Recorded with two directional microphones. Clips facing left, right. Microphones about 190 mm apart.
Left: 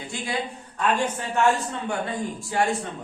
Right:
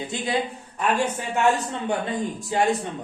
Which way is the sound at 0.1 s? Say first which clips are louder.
Right 1 dB; 20° right (ahead or behind).